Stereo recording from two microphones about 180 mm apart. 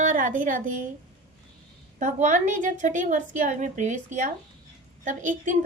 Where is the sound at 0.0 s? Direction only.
45° right (ahead or behind).